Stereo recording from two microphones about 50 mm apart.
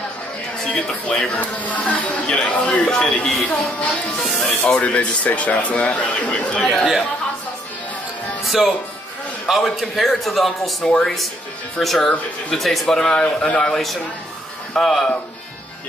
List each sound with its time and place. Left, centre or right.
0.7 s speech: left
3.3 s a man's voice: centre
4.6 s speech: left
6.2 s speech: centre
8.5 s a man's voice: centre
10.8 s speech: centre
11.8 s a man's voice: centre